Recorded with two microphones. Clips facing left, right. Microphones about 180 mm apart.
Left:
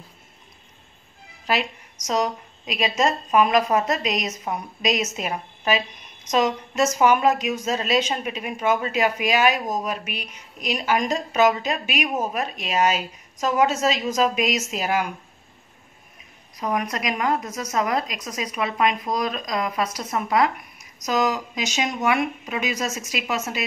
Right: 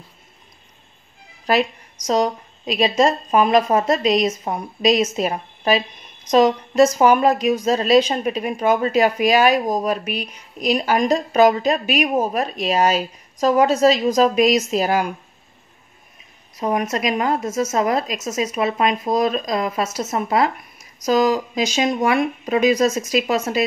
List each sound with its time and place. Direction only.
1.5 s a woman's voice: 35° right (ahead or behind)
16.5 s a woman's voice: 25° right (ahead or behind)